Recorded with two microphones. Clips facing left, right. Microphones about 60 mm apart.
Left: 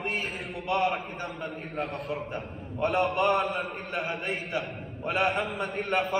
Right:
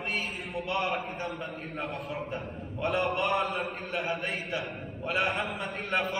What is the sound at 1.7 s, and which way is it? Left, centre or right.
Speech, left.